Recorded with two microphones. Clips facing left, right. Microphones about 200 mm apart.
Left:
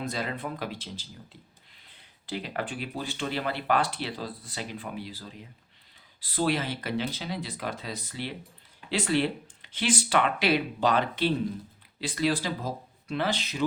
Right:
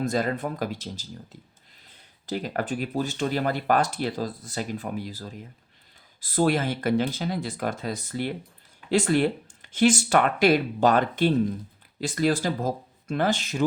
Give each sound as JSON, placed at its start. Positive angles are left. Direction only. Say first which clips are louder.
{"t": 0.0, "sound": "speech", "louder": "right 7 dB", "side_deg": -45}